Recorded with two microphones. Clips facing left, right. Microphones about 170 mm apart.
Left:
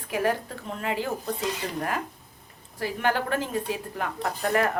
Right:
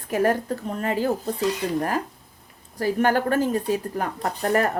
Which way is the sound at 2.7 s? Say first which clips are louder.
Right 5 dB; 40° right (ahead or behind).